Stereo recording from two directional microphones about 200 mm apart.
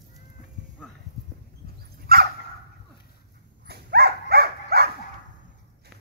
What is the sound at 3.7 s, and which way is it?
Dog, 55° right (ahead or behind).